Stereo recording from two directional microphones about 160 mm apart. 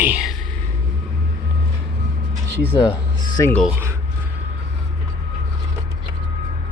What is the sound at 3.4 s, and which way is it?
Speech, 20° left (ahead or behind).